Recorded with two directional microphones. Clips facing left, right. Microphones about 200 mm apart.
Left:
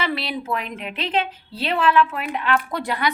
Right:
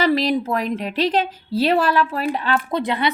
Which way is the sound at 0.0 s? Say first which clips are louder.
Right 8 dB; 40° right (ahead or behind).